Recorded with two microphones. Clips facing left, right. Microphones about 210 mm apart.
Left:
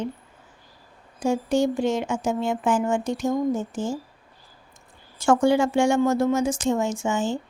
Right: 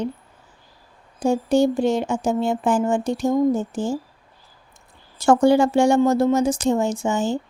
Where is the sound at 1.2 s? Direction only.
35° right (ahead or behind).